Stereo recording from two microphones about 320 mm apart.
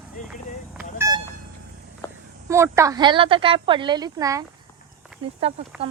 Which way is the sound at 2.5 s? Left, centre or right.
Centre.